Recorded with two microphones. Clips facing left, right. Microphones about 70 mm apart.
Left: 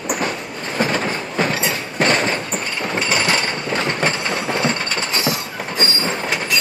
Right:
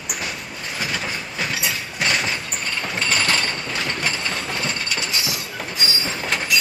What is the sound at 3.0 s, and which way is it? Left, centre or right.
Mechanisms, centre.